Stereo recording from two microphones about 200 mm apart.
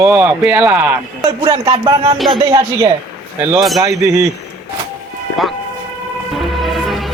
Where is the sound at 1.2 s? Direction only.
20° right (ahead or behind).